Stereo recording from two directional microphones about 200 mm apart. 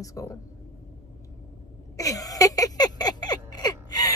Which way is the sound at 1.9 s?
15° left (ahead or behind).